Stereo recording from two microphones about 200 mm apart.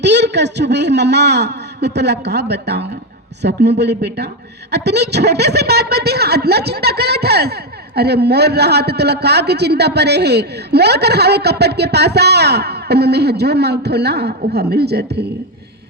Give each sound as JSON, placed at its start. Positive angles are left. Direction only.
{"t": 0.0, "sound": "a man's voice", "side_deg": -60}